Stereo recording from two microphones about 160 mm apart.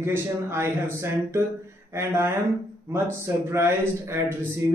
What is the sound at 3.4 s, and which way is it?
Speech, 15° right (ahead or behind).